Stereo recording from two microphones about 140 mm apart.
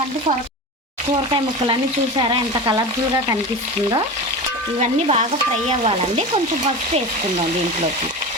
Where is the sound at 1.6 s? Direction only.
35° right (ahead or behind).